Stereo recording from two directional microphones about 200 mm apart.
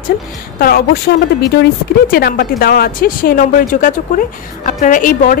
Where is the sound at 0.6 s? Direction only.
50° left (ahead or behind).